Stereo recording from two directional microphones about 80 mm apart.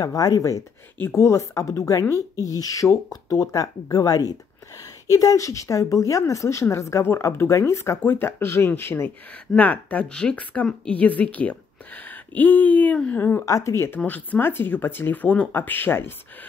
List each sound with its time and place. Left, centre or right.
0.0 s speech: left
1.0 s a woman's voice: left
9.6 s a woman's voice: centre
12.1 s a sound: left
13.5 s a woman's voice: left
14.0 s speech: centre